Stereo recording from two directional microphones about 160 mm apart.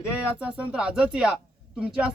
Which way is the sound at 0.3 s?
10° right (ahead or behind).